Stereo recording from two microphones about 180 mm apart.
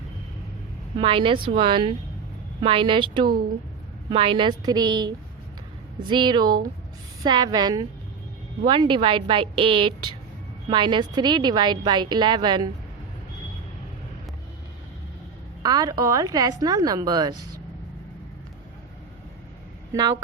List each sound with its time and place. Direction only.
0.9 s a woman's voice: 30° right (ahead or behind)
15.6 s a woman's voice: 20° right (ahead or behind)
19.9 s a woman's voice: 20° right (ahead or behind)